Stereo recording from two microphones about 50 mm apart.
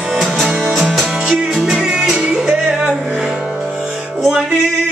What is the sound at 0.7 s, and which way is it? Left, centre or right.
Music, centre.